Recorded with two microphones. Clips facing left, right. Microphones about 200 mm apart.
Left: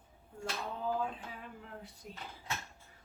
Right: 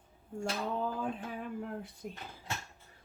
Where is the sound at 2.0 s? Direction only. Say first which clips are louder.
Right 6 dB; 55° right (ahead or behind).